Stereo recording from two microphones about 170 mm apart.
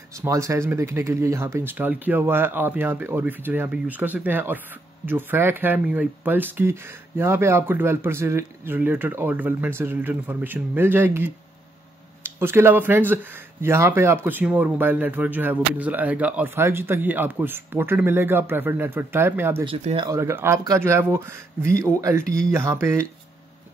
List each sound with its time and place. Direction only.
0.1 s speech: 20° right (ahead or behind)
19.6 s speech: 35° right (ahead or behind)
20.1 s speech: 15° right (ahead or behind)